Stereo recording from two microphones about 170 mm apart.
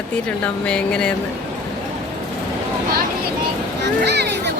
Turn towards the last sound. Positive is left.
turn(degrees=-85)